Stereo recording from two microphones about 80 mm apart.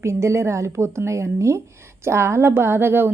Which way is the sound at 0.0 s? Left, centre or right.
Right.